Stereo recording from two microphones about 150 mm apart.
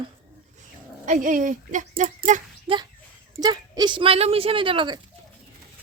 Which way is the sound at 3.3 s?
25° right (ahead or behind).